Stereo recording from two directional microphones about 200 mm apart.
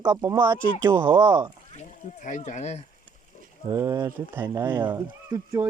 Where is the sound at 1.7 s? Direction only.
40° left (ahead or behind).